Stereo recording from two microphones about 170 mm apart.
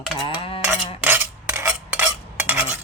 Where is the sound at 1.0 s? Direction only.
10° right (ahead or behind).